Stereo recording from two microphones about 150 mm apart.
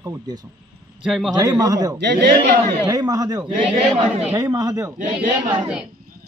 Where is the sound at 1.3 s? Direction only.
25° right (ahead or behind).